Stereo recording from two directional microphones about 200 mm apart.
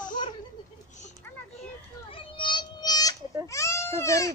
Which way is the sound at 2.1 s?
25° left (ahead or behind).